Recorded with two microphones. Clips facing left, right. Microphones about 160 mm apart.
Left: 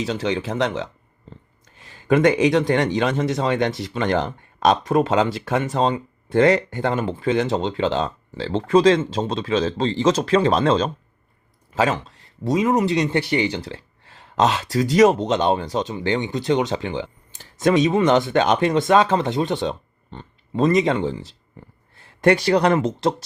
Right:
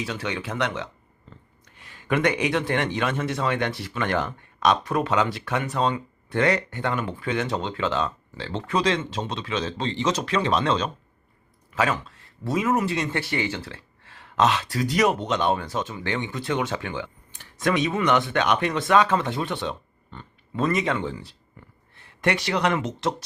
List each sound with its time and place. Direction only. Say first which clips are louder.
0.0 s speech: left 7 dB; 25° left (ahead or behind)
13.7 s a sound: left 6 dB; 25° left (ahead or behind)
14.7 s speech: left 7 dB; 25° left (ahead or behind)
19.5 s a sound: left 5 dB; 35° left (ahead or behind)
20.7 s speech: left 6 dB; 25° left (ahead or behind)
21.9 s speech: left 8 dB; 35° left (ahead or behind)